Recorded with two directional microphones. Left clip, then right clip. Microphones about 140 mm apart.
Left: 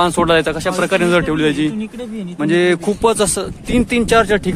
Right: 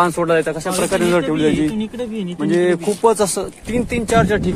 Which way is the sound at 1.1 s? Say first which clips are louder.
Left 1 dB; 35° left (ahead or behind).